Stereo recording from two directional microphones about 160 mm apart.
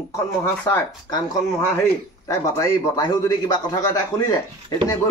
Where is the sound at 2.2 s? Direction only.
20° left (ahead or behind).